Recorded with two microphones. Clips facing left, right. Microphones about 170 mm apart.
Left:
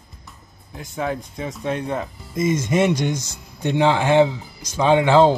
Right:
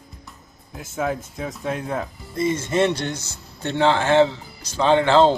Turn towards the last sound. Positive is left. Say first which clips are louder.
# left 1 dB
turn(degrees=10)  # may be behind; listen again after turning